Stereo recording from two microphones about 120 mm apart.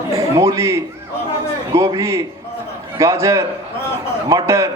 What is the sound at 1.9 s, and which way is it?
A man's voice, 25° right (ahead or behind).